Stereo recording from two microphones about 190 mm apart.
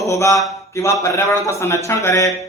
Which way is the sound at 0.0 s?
15° left (ahead or behind).